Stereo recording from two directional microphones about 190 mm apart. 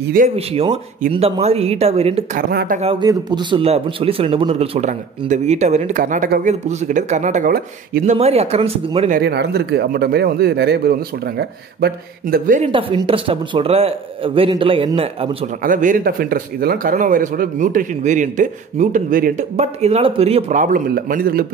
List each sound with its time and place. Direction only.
0.0 s speech: 50° right (ahead or behind)
0.4 s speech: 30° right (ahead or behind)
2.3 s speech: 50° right (ahead or behind)
2.8 s a man's voice: 30° right (ahead or behind); by 8.0 s 50° right (ahead or behind)
8.0 s speech: 35° right (ahead or behind)
9.1 s a man's voice: 60° right (ahead or behind)
12.6 s a man's voice: 30° right (ahead or behind)
15.6 s speech: 45° right (ahead or behind)